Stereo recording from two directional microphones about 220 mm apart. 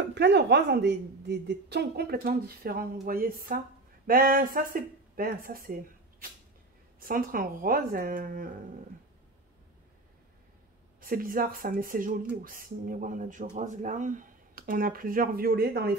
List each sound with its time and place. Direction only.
0.0 s a woman's voice: 50° right (ahead or behind)
7.0 s speech: 40° right (ahead or behind)
11.0 s speech: 40° right (ahead or behind)